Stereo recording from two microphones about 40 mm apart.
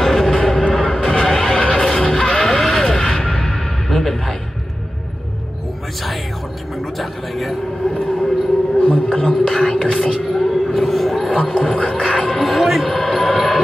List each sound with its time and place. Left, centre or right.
0.0 s music: centre
0.3 s music: left
0.7 s music: centre
2.1 s vehicle: centre
2.9 s music: centre
6.8 s a sound: centre
8.7 s a sound: left
9.3 s whispering: centre
9.9 s a sound: centre
11.4 s music: centre
12.4 s a sound: centre
13.3 s music: centre